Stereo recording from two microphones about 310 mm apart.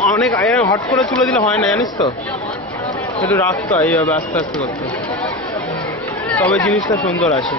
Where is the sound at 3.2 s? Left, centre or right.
Centre.